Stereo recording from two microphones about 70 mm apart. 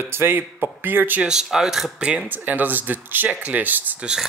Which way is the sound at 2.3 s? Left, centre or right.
Right.